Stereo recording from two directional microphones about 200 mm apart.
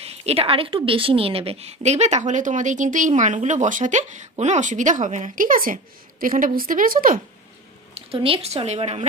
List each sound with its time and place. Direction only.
0.0 s a woman's voice: 30° right (ahead or behind)
7.9 s a woman's voice: 30° right (ahead or behind)